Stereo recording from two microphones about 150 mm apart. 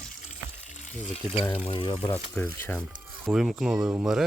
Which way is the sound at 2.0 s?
10° left (ahead or behind).